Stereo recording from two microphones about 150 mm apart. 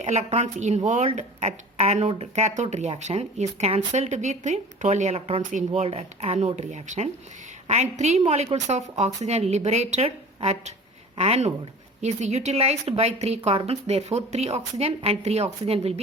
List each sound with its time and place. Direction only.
0.0 s speech: 45° right (ahead or behind)